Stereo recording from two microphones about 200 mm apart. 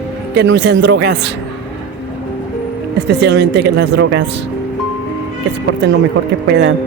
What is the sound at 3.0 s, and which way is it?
Speech, 55° right (ahead or behind).